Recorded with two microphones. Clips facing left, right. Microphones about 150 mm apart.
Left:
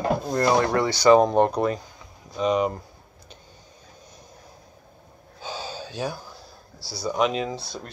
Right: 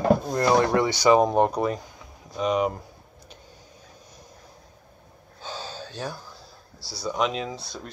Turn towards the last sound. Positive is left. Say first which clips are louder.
# left 3 dB
turn(degrees=0)  # may be behind; listen again after turning